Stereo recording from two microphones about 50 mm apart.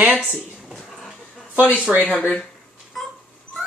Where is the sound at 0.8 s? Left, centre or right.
Centre.